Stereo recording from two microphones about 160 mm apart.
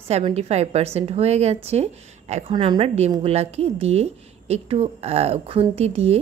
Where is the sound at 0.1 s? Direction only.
40° right (ahead or behind).